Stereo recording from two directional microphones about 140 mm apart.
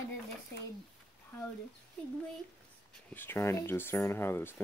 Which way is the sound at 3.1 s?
15° left (ahead or behind).